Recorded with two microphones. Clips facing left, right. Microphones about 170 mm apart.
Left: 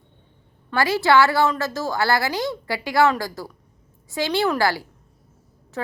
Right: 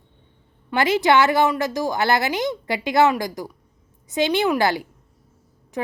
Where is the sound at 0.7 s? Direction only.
20° right (ahead or behind).